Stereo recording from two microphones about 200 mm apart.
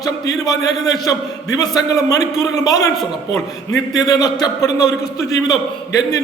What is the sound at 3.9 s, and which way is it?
A man's voice, 15° left (ahead or behind).